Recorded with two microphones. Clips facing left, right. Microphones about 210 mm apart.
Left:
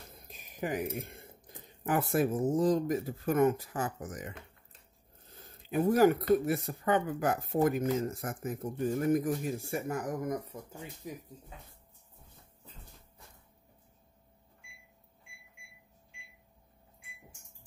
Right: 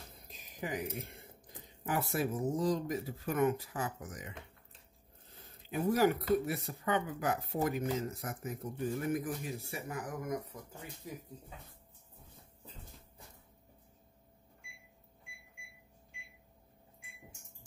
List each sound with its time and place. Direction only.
0.6 s speech: 50° left (ahead or behind)
1.9 s speech: 50° left (ahead or behind)
5.9 s speech: 50° left (ahead or behind)
11.0 s speech: 20° left (ahead or behind)